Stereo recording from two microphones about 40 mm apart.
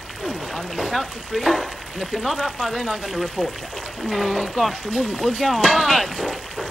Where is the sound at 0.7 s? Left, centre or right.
Centre.